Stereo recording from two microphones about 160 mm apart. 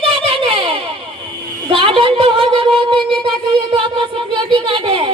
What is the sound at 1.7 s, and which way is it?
Speech, 35° right (ahead or behind).